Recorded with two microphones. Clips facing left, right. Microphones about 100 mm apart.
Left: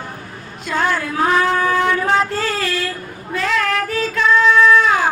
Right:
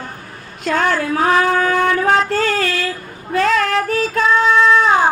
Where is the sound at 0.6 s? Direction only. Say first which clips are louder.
Right 2 dB; 60° right (ahead or behind).